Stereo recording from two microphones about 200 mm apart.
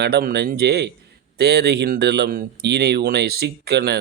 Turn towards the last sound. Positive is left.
turn(degrees=-55)  # may be behind; listen again after turning